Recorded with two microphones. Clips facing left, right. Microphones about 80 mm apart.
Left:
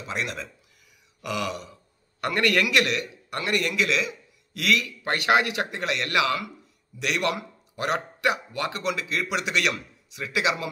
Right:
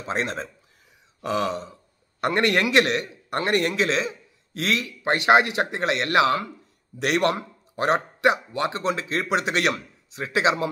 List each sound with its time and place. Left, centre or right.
0.0 s a man's voice: right
1.2 s a sound: right
2.1 s a man's voice: right